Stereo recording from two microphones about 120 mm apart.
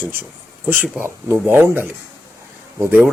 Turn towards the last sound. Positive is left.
turn(degrees=-15)  # may be behind; listen again after turning